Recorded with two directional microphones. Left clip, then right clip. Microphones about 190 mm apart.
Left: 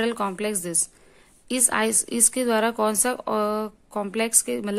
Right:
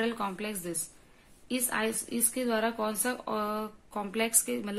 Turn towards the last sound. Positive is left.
turn(degrees=45)  # may be behind; listen again after turning